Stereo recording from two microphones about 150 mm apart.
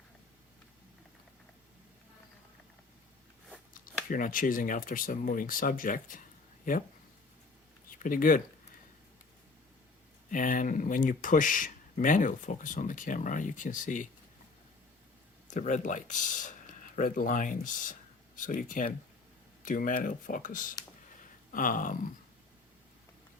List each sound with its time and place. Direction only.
3.8 s speech: 65° left (ahead or behind)
7.9 s speech: 65° left (ahead or behind)
10.3 s speech: 65° left (ahead or behind)
15.4 s speech: 55° left (ahead or behind)